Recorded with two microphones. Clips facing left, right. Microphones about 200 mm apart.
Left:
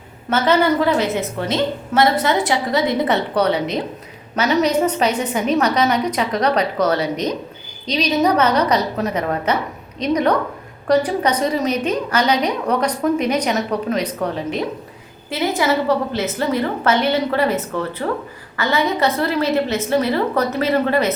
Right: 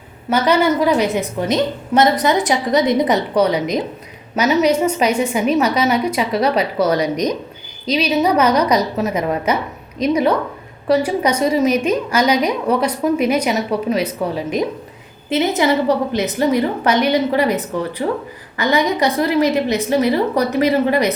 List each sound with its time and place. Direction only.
0.3 s a woman's voice: 15° right (ahead or behind)
15.3 s a woman's voice: 20° right (ahead or behind)